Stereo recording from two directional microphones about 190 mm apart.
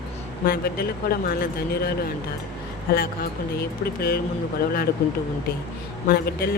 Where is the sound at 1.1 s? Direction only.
55° left (ahead or behind).